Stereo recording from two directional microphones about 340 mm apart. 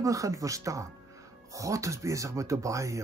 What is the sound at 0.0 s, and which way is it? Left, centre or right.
Speech, centre.